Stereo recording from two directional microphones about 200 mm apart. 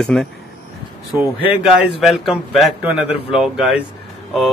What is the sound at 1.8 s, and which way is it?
A man's voice, centre (ahead or behind).